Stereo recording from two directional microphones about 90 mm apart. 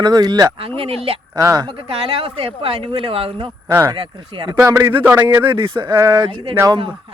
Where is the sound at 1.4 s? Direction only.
35° right (ahead or behind).